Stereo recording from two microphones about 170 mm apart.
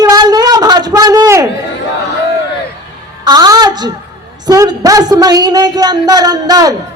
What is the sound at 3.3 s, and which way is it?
A woman's voice, 20° right (ahead or behind).